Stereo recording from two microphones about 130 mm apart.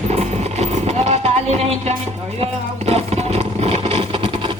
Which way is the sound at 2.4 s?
50° right (ahead or behind).